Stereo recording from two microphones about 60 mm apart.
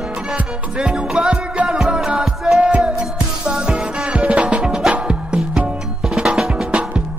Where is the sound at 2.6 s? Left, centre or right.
Centre.